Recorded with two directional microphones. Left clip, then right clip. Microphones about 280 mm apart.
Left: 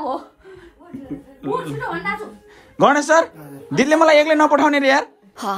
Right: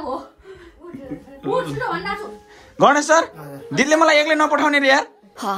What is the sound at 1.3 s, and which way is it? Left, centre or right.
Speech, centre.